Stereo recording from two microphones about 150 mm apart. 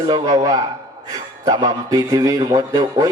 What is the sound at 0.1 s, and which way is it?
Speech, 25° right (ahead or behind).